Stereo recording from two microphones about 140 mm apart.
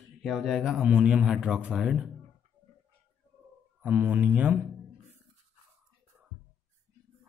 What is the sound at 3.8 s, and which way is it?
Speech, 10° right (ahead or behind).